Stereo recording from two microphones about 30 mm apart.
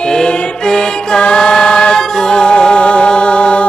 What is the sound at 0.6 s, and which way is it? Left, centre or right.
Mantra, left.